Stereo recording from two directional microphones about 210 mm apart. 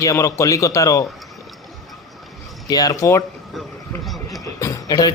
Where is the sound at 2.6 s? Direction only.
15° left (ahead or behind).